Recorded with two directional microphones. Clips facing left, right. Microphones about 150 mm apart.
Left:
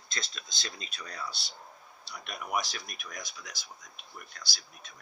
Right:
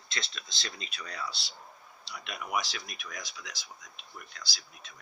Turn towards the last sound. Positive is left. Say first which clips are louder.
# even
turn(degrees=45)  # may be behind; listen again after turning